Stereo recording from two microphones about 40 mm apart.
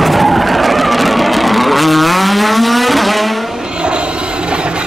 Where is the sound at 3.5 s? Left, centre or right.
Right.